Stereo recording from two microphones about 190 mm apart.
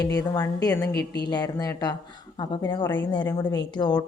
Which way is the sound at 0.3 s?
15° left (ahead or behind).